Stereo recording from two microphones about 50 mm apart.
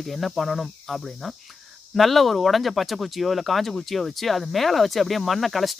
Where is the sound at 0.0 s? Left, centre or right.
Centre.